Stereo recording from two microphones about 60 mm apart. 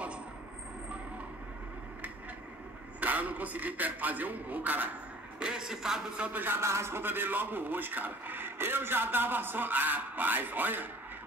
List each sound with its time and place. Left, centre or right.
3.0 s a man's voice: right
5.4 s a man's voice: centre
6.1 s a man's voice: centre
6.4 s a man's voice: right